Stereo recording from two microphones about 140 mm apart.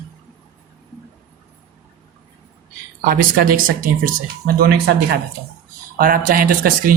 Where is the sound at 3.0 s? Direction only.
90° right.